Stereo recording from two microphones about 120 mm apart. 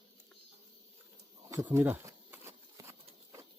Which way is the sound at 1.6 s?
15° right (ahead or behind).